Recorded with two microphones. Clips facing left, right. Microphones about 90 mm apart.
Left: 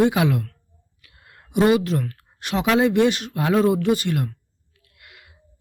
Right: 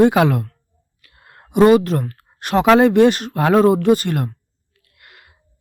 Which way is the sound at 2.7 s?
50° right (ahead or behind).